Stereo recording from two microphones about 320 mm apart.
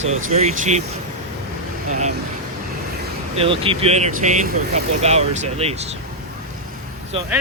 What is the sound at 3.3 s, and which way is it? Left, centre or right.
Speech, centre.